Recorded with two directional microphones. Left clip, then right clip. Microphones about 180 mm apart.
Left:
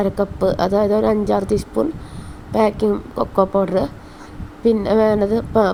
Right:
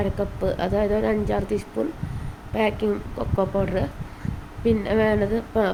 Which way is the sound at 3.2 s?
25° left (ahead or behind).